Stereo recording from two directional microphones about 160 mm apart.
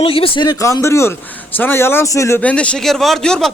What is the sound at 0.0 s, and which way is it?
A man's voice, 35° left (ahead or behind).